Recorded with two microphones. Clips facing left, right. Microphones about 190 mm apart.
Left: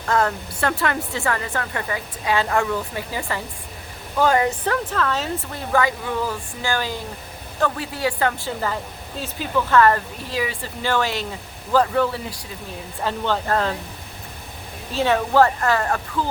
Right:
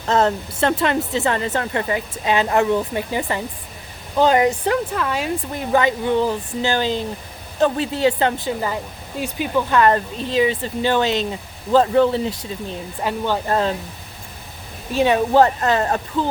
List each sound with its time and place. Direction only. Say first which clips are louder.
0.0 s speech: right 3 dB; 25° right (ahead or behind)
13.0 s speech: right 1 dB; 15° right (ahead or behind)
14.9 s speech: right 3 dB; 15° right (ahead or behind)